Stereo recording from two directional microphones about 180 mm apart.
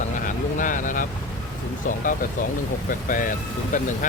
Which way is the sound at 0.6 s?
45° left (ahead or behind).